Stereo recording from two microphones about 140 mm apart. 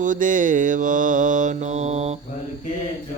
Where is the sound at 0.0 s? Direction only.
70° right (ahead or behind); by 2.1 s 50° right (ahead or behind).